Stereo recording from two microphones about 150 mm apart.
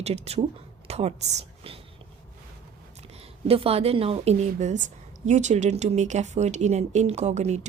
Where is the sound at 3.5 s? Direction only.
40° right (ahead or behind).